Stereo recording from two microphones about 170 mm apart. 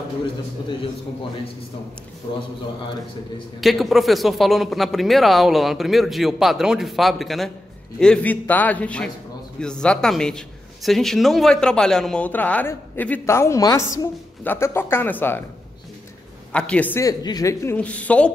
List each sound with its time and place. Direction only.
3.6 s a man's voice: centre (ahead or behind)
16.5 s a man's voice: 5° left (ahead or behind)
17.0 s speech: 20° left (ahead or behind)
17.7 s a man's voice: 10° left (ahead or behind)